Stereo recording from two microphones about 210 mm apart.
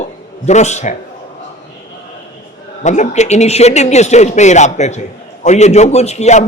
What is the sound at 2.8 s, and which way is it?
A man's voice, 35° left (ahead or behind).